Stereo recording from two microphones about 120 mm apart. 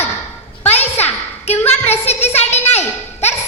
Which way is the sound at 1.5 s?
60° left (ahead or behind).